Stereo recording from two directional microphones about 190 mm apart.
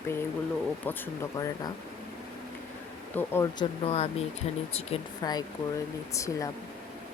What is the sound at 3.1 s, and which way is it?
Speech, 10° left (ahead or behind).